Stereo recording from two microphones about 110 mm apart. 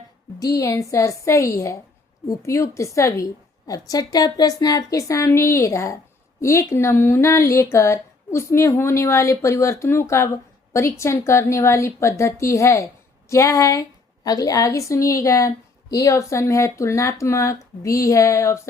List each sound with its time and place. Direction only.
0.3 s a woman's voice: 30° left (ahead or behind)